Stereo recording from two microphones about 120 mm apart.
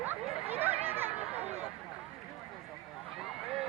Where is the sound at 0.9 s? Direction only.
15° right (ahead or behind).